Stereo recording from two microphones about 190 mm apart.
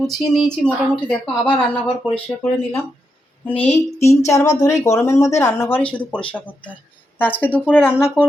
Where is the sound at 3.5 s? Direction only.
10° left (ahead or behind).